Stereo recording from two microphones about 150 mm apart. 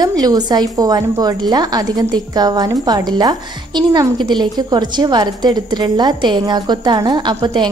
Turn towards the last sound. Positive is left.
turn(degrees=-30)  # may be behind; listen again after turning